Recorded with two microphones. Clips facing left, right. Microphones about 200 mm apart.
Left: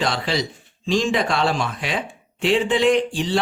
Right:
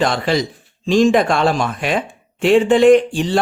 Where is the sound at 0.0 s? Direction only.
50° right (ahead or behind).